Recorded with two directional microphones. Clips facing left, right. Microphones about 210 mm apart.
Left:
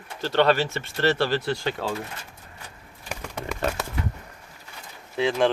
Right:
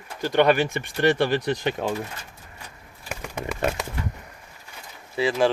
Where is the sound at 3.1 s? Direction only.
10° right (ahead or behind).